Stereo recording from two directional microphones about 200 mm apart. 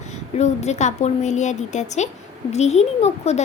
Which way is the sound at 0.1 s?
35° left (ahead or behind).